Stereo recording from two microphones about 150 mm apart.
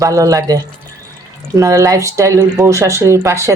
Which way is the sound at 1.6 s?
20° right (ahead or behind).